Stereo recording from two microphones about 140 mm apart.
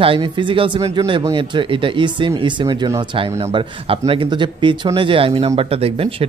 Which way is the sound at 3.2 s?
45° right (ahead or behind).